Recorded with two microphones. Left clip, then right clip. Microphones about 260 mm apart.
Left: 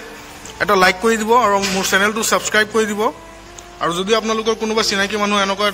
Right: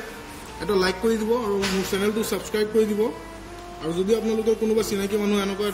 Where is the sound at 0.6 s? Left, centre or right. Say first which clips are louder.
Left 10 dB; left.